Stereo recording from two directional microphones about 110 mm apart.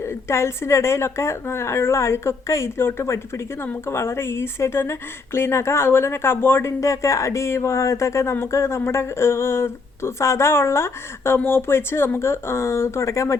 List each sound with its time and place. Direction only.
0.0 s speech: 25° left (ahead or behind)